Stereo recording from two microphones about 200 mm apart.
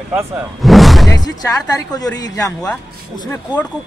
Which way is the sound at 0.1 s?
Centre (ahead or behind).